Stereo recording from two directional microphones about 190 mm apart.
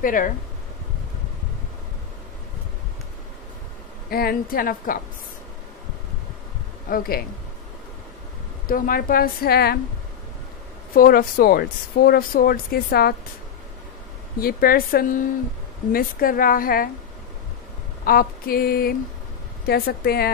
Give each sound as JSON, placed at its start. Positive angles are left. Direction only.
{"t": 0.0, "sound": "speech", "side_deg": 45}
{"t": 4.1, "sound": "speech", "side_deg": 55}
{"t": 6.9, "sound": "speech", "side_deg": 50}
{"t": 8.6, "sound": "speech", "side_deg": 45}
{"t": 11.0, "sound": "speech", "side_deg": 50}
{"t": 14.4, "sound": "speech", "side_deg": 50}
{"t": 18.0, "sound": "speech", "side_deg": 50}